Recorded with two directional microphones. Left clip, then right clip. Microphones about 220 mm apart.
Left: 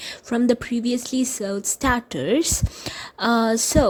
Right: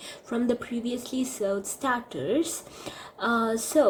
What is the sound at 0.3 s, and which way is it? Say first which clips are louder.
Speech: left 7 dB; 40° left (ahead or behind).